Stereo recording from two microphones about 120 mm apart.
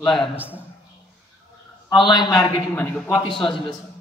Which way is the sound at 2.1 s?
35° left (ahead or behind).